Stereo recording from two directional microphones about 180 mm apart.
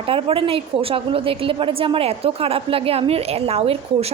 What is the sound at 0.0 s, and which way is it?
A woman's voice, 30° right (ahead or behind).